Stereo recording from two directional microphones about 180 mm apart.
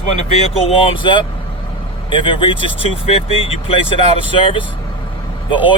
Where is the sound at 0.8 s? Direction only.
30° left (ahead or behind).